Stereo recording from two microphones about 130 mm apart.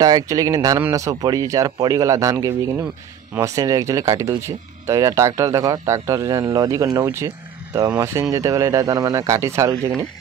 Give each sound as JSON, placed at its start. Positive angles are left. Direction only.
{"t": 0.0, "sound": "speech", "side_deg": -30}